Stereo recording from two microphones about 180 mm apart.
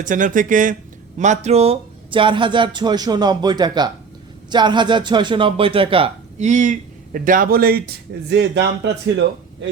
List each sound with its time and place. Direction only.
0.0 s speech: 45° right (ahead or behind)
8.3 s speech: 75° right (ahead or behind)